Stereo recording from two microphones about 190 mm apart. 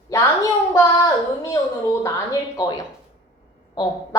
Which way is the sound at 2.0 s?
20° left (ahead or behind).